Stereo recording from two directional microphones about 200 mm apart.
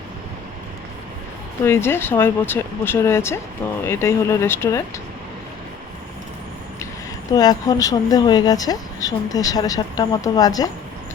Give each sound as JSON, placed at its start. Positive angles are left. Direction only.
{"t": 1.6, "sound": "speech", "side_deg": 10}
{"t": 7.3, "sound": "speech", "side_deg": 20}